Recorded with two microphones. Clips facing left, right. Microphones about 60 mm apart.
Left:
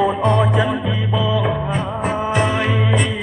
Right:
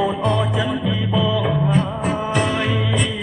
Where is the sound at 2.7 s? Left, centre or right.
Centre.